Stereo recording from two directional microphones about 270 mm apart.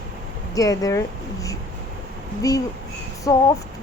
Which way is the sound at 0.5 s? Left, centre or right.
Centre.